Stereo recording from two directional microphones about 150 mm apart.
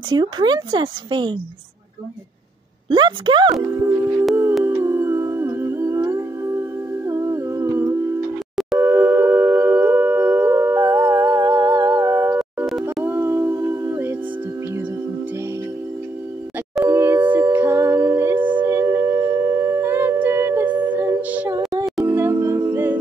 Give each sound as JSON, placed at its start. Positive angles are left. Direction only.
{"t": 0.1, "sound": "speech", "side_deg": -30}
{"t": 2.9, "sound": "speech", "side_deg": -30}
{"t": 3.7, "sound": "speech", "side_deg": -15}
{"t": 4.6, "sound": "music", "side_deg": -15}
{"t": 7.1, "sound": "humming", "side_deg": -20}
{"t": 8.7, "sound": "howl", "side_deg": -15}
{"t": 13.0, "sound": "a sound", "side_deg": -15}
{"t": 16.8, "sound": "a sound", "side_deg": -15}
{"t": 18.6, "sound": "singing bowl", "side_deg": -15}
{"t": 19.6, "sound": "music", "side_deg": -15}